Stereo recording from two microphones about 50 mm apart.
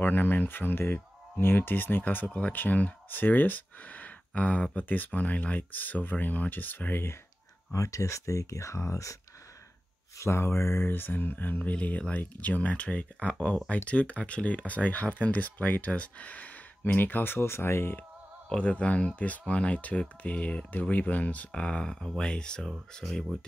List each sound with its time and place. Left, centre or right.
0.0 s speech: left
2.1 s speech: left
7.7 s speech: left
10.1 s speech: left
16.8 s speech: left
18.5 s speech: left